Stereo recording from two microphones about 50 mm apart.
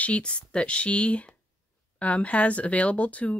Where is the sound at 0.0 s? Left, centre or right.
Left.